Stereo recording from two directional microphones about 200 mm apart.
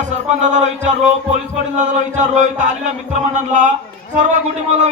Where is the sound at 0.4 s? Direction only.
35° right (ahead or behind).